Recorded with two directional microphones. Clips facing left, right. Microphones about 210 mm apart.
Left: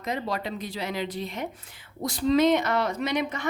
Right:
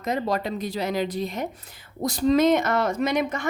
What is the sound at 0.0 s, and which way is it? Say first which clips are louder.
Speech: right 4 dB; 45° right (ahead or behind).